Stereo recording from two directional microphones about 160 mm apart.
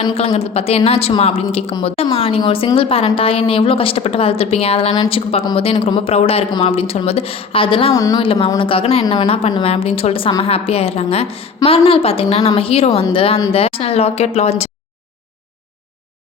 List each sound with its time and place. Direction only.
0.0 s a woman's voice: 35° left (ahead or behind)
7.9 s speech: 20° left (ahead or behind)
8.2 s a woman's voice: 35° left (ahead or behind)